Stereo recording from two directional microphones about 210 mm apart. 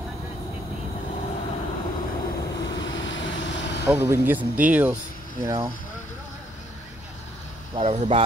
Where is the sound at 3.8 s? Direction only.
10° right (ahead or behind).